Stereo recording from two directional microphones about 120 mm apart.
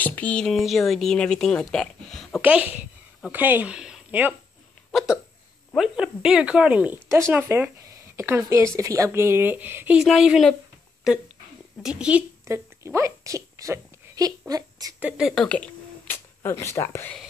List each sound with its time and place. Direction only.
0.0 s speech: 15° left (ahead or behind)
2.4 s speech: 10° right (ahead or behind)
5.8 s speech: 5° right (ahead or behind)
7.1 s a woman's voice: 20° right (ahead or behind)
9.9 s speech: 5° right (ahead or behind)
12.4 s a sound: 25° right (ahead or behind)
14.5 s a woman's voice: 30° right (ahead or behind)
15.0 s speech: 10° right (ahead or behind)
15.4 s speech: 10° left (ahead or behind)